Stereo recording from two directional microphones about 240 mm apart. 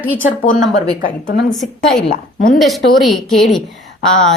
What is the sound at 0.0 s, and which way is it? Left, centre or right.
Speech, centre.